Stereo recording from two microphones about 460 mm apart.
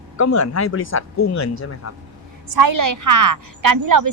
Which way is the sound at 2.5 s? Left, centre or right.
Right.